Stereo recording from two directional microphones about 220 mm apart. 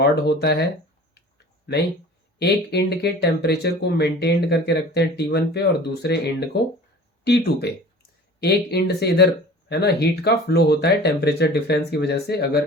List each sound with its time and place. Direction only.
0.0 s speech: 50° left (ahead or behind)
2.4 s speech: 50° left (ahead or behind)